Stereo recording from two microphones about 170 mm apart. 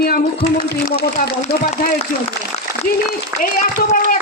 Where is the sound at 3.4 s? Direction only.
55° left (ahead or behind).